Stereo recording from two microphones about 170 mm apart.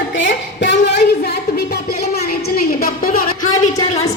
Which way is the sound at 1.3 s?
65° left (ahead or behind).